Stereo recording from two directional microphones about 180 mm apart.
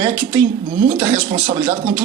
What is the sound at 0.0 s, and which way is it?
Speech, 25° right (ahead or behind).